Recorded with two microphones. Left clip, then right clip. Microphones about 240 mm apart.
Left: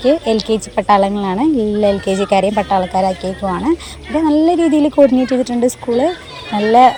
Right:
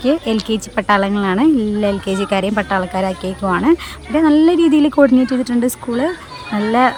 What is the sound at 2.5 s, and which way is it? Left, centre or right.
Speech, right.